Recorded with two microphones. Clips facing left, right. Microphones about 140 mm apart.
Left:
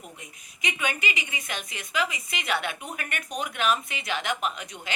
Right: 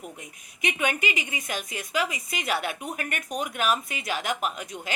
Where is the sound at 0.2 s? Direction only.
50° right (ahead or behind).